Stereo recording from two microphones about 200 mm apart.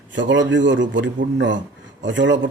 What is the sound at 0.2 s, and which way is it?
A man's voice, 65° right (ahead or behind).